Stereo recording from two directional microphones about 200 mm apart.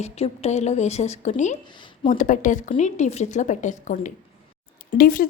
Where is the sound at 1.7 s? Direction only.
25° left (ahead or behind).